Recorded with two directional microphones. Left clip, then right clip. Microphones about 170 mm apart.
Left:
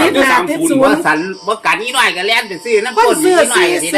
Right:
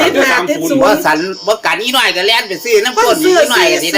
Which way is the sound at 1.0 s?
80° right.